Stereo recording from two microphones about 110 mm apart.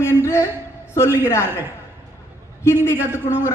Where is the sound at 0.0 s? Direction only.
25° left (ahead or behind).